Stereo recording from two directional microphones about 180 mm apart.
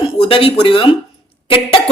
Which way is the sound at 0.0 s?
30° left (ahead or behind).